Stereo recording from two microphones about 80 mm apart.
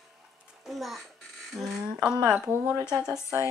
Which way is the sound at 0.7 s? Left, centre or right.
Centre.